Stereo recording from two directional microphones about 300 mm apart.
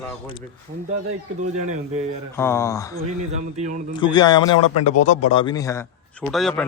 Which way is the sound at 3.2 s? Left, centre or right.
Right.